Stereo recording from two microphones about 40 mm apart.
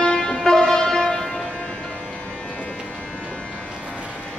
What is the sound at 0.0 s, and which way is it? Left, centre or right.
Music, centre.